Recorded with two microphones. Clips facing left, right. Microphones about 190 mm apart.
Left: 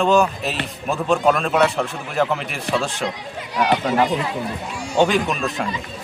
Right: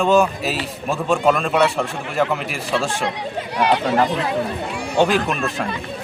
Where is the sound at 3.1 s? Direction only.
65° right (ahead or behind).